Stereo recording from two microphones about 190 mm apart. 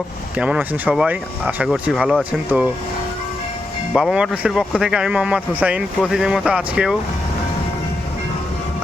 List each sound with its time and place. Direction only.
0.3 s speech: 5° right (ahead or behind)
3.9 s speech: 5° right (ahead or behind)